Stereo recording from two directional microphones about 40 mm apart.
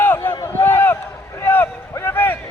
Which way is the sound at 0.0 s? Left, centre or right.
Left.